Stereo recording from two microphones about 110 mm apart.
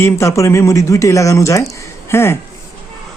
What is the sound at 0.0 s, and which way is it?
Speech, 25° left (ahead or behind).